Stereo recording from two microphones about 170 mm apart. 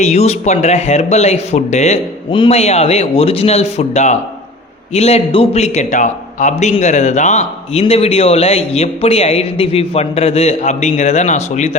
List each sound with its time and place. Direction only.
0.0 s a man's voice: 40° left (ahead or behind)